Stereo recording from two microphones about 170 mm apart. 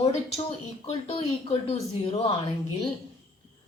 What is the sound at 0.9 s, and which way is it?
A woman's voice, 35° left (ahead or behind).